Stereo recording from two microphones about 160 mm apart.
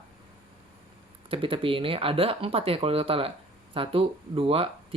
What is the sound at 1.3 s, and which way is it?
Speech, 35° right (ahead or behind).